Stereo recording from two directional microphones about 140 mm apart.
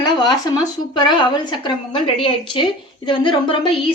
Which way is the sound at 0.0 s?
30° left (ahead or behind).